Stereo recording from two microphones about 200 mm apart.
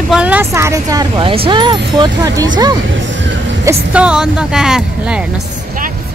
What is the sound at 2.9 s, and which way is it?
Music, 70° right (ahead or behind).